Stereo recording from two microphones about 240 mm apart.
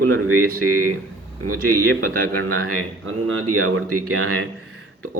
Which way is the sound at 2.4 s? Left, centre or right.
Right.